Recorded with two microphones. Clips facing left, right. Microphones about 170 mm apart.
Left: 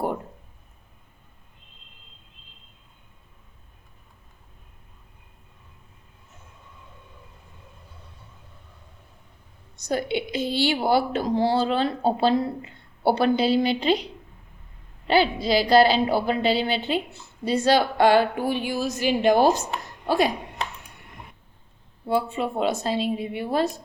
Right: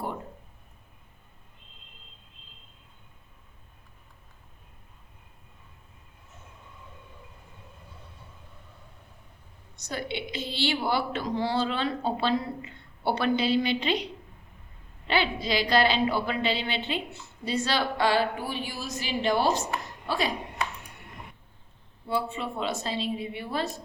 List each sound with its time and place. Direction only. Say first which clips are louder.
9.9 s a woman's voice: left 8 dB; 45° left (ahead or behind)
15.0 s a woman's voice: left 7 dB; 40° left (ahead or behind)
22.0 s a woman's voice: left 6 dB; 45° left (ahead or behind)